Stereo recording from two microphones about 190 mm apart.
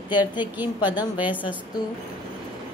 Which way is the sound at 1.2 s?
10° right (ahead or behind).